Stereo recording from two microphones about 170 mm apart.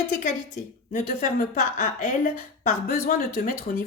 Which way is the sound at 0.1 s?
45° left (ahead or behind).